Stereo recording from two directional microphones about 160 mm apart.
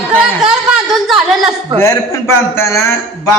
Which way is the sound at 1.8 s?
20° left (ahead or behind).